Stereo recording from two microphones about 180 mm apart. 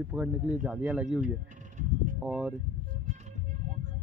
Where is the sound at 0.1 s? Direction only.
10° right (ahead or behind).